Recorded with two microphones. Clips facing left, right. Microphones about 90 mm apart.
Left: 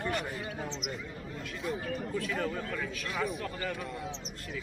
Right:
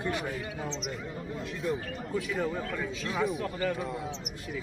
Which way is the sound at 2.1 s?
5° right (ahead or behind).